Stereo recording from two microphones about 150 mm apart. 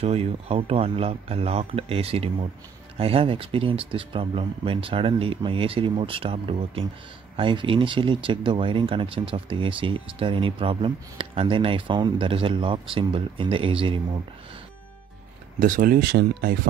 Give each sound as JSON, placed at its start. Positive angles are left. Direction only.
{"t": 0.0, "sound": "speech", "side_deg": -40}
{"t": 15.6, "sound": "speech", "side_deg": -60}